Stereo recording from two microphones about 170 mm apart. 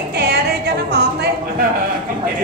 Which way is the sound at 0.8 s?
75° right (ahead or behind).